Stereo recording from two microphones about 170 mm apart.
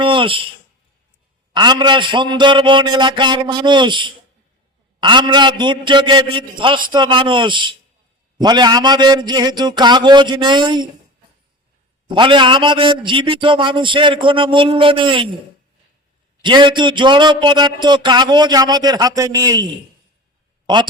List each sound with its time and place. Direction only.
0.0 s a sound: 30° right (ahead or behind)
1.5 s speech: 25° right (ahead or behind)
12.0 s speech: 30° right (ahead or behind)
16.4 s speech: 25° right (ahead or behind)